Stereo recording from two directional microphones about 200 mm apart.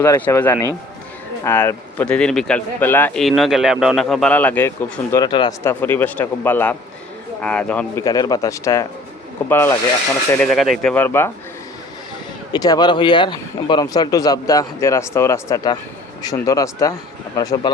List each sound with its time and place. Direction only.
0.0 s speech: 15° left (ahead or behind)
8.0 s speech: 20° left (ahead or behind)
10.4 s speech: centre (ahead or behind)
12.5 s speech: 20° left (ahead or behind)